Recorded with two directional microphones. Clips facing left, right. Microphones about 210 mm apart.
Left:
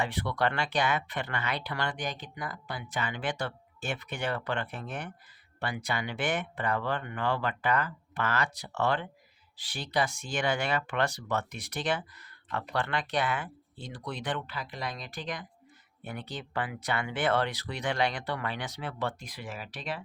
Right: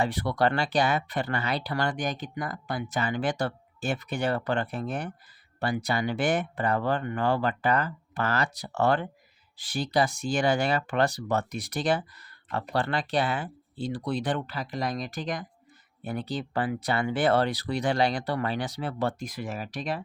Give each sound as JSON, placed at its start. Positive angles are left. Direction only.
{"t": 0.0, "sound": "speech", "side_deg": -40}